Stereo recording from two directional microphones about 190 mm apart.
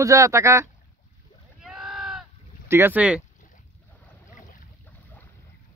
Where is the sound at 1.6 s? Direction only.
5° right (ahead or behind).